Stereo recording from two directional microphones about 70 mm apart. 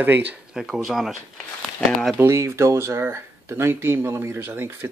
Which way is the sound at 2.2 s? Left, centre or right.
Right.